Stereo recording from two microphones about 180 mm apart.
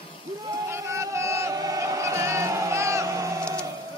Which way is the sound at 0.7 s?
15° right (ahead or behind).